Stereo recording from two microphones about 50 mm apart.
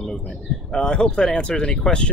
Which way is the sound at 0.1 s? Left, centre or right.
Centre.